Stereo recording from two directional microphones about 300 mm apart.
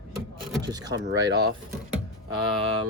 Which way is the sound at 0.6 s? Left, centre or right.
Centre.